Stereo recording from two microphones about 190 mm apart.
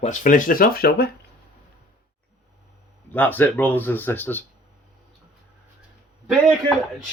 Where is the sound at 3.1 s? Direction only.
10° left (ahead or behind).